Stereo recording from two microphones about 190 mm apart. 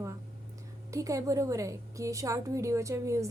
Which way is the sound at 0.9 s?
15° right (ahead or behind).